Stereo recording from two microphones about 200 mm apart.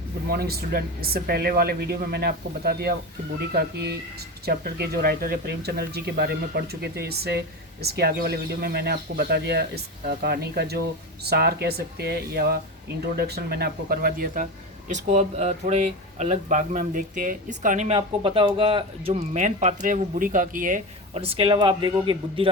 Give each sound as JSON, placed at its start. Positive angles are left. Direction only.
{"t": 0.3, "sound": "a man's voice", "side_deg": -50}